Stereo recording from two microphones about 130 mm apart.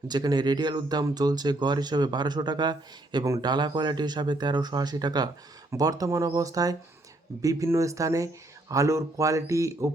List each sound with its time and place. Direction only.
0.1 s speech: 35° right (ahead or behind)